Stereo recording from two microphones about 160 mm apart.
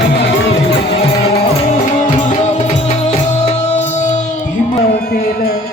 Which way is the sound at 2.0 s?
50° left (ahead or behind).